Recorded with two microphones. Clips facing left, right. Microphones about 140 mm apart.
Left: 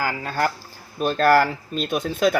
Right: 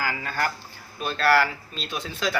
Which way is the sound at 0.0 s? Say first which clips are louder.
Left 4 dB; 45° left (ahead or behind).